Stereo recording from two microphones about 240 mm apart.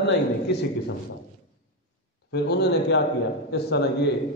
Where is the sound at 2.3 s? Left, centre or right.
Left.